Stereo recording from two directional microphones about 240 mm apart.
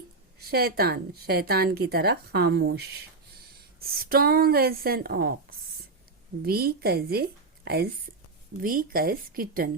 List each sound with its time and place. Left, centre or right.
0.3 s a woman's voice: right